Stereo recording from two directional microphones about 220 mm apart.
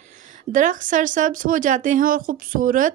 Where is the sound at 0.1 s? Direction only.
35° right (ahead or behind).